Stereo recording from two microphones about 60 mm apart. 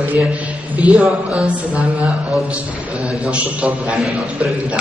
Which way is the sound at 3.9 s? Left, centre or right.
Centre.